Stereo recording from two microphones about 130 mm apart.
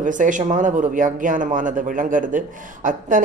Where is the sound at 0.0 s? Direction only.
80° right.